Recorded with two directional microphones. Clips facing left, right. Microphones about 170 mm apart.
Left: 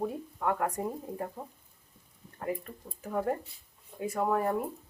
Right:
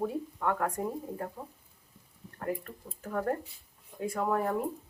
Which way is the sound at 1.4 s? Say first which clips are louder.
Left 1 dB; 25° left (ahead or behind).